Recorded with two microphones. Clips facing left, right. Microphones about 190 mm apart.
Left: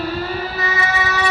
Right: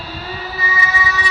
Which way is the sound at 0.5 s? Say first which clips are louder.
Left 2 dB; 65° left (ahead or behind).